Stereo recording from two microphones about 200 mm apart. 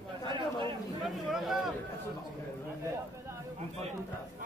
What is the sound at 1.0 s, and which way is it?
Speech, centre (ahead or behind).